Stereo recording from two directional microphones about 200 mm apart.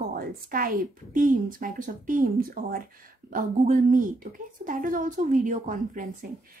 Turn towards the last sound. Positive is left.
turn(degrees=-40)  # may be behind; listen again after turning